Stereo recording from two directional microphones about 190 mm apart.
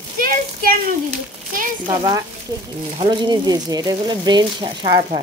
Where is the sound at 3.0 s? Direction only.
25° right (ahead or behind).